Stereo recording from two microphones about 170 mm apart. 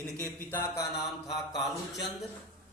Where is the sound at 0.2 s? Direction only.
15° left (ahead or behind).